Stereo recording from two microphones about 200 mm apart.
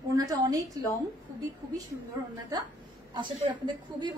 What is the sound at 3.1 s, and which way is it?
Speech, 25° right (ahead or behind).